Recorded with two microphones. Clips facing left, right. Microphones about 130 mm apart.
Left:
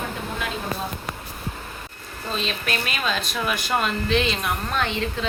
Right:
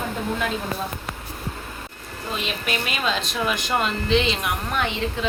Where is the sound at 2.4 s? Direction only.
15° right (ahead or behind).